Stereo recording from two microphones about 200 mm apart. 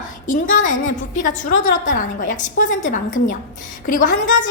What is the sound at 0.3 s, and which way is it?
A woman's voice, 40° left (ahead or behind).